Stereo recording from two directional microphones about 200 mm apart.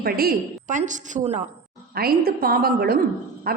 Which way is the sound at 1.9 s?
50° right (ahead or behind).